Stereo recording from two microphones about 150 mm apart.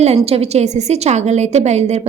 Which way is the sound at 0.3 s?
45° right (ahead or behind).